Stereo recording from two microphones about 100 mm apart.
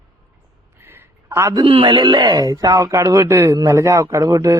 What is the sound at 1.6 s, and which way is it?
Speech, 60° right (ahead or behind).